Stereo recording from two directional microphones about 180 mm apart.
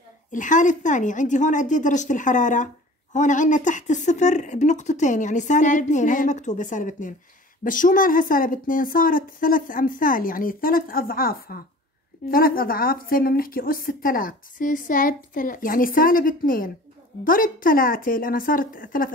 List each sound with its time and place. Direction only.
0.3 s a woman's voice: 45° left (ahead or behind)